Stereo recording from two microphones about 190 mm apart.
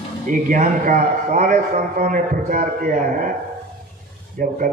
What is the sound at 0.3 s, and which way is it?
A man's voice, 45° right (ahead or behind).